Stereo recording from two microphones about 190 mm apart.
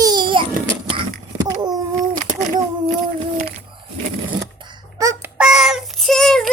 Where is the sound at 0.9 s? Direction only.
25° right (ahead or behind).